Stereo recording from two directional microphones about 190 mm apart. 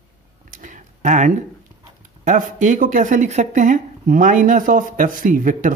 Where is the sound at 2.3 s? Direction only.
45° right (ahead or behind).